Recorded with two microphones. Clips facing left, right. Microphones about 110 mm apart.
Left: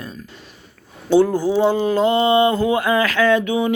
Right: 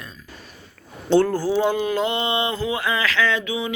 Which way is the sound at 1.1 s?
15° left (ahead or behind).